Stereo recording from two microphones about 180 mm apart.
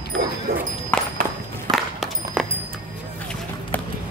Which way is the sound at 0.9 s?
10° left (ahead or behind).